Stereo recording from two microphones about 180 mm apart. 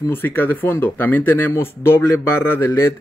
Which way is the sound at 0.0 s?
10° left (ahead or behind).